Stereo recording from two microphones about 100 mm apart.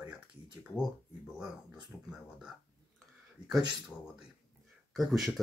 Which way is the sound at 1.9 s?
35° left (ahead or behind).